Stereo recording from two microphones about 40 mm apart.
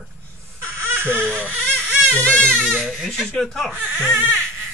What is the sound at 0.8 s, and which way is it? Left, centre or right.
Baby cry, right.